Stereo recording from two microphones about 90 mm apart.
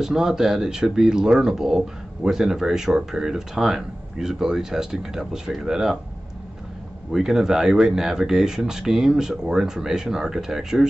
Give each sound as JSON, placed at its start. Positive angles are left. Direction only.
{"t": 0.0, "sound": "speech", "side_deg": -5}
{"t": 7.1, "sound": "speech", "side_deg": -5}